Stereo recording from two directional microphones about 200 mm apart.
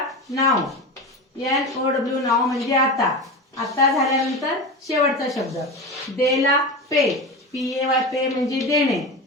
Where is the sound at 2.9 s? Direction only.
Centre (ahead or behind).